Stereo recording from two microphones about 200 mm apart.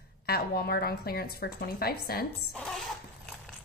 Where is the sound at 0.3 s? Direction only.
50° left (ahead or behind).